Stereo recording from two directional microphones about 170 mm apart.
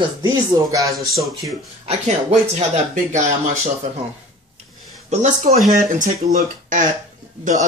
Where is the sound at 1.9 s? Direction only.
40° right (ahead or behind).